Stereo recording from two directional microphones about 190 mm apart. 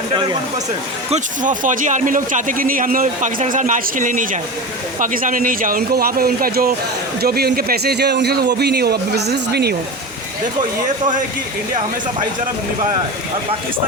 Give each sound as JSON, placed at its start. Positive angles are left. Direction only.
{"t": 1.1, "sound": "a man's voice", "side_deg": -40}